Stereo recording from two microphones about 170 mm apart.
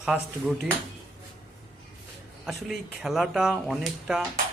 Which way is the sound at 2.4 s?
Centre (ahead or behind).